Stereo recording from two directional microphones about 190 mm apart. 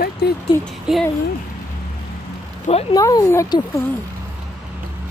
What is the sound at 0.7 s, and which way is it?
Speech, centre (ahead or behind).